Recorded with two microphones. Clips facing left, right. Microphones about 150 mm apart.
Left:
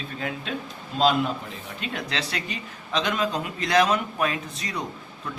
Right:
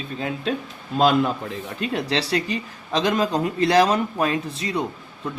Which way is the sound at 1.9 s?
35° right (ahead or behind).